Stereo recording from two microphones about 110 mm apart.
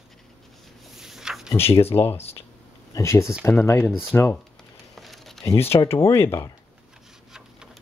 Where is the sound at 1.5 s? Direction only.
25° left (ahead or behind).